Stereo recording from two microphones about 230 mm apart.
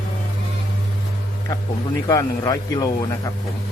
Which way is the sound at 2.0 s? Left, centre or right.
Centre.